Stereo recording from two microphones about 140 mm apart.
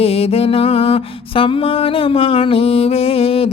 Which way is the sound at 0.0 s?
45° left (ahead or behind).